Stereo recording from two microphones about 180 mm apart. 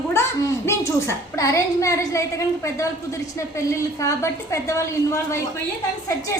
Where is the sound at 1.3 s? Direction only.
15° left (ahead or behind).